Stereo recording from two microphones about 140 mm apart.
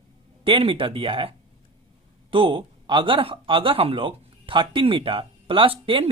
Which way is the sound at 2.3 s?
40° right (ahead or behind).